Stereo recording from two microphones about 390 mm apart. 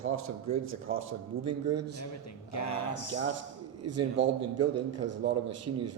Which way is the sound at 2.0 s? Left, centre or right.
Left.